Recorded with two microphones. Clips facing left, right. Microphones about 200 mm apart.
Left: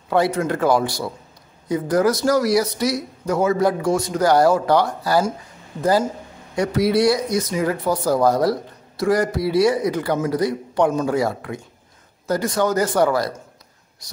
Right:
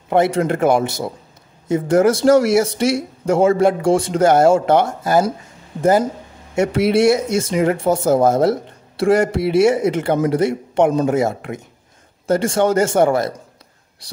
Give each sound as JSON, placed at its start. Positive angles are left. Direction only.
{"t": 0.1, "sound": "speech", "side_deg": -25}